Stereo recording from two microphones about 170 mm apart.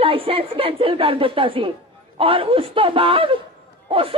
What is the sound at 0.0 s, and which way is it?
Chuckle, 35° right (ahead or behind).